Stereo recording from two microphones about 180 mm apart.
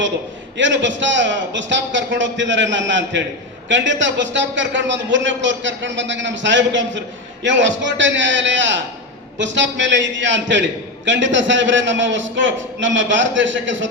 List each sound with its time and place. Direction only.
0.5 s a man's voice: 90° right